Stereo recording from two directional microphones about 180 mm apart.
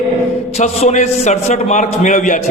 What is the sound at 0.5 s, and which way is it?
A man's voice, 35° left (ahead or behind).